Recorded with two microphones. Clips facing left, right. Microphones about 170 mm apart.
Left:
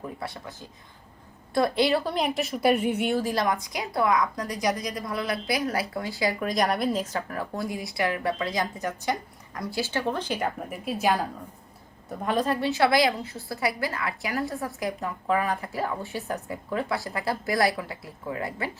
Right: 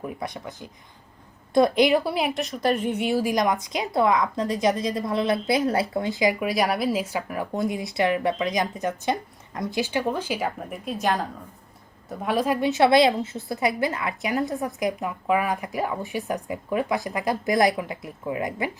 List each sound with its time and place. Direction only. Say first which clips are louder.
0.0 s a woman's voice: right 3 dB; 15° right (ahead or behind); by 3.2 s centre (ahead or behind)
3.2 s a woman's voice: right 3 dB; 20° right (ahead or behind)
6.5 s a woman's voice: right 2 dB; 5° right (ahead or behind)
12.0 s a woman's voice: right 2 dB; 5° right (ahead or behind)